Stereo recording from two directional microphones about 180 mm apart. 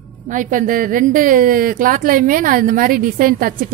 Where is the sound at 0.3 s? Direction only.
45° right (ahead or behind).